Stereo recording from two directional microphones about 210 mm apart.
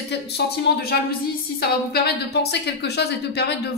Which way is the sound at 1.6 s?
50° left (ahead or behind).